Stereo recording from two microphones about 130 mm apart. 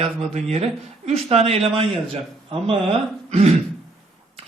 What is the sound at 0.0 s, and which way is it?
A man's voice, 50° right (ahead or behind).